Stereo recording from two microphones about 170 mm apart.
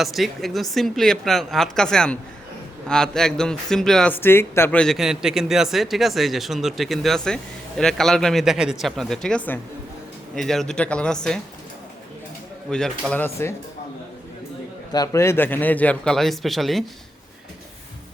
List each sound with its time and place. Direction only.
0.0 s a man's voice: centre (ahead or behind)
12.7 s speech: 5° left (ahead or behind)
14.9 s speech: 20° left (ahead or behind); by 16.8 s centre (ahead or behind)